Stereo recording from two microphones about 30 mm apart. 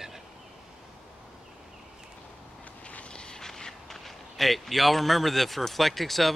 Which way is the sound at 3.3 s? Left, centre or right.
Centre.